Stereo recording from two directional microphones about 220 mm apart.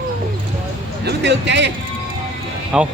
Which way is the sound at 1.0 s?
50° right (ahead or behind).